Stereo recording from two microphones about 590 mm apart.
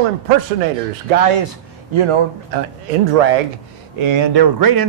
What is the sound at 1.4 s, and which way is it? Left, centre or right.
Speech, right.